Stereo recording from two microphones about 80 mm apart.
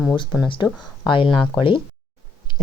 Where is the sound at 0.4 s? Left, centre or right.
Left.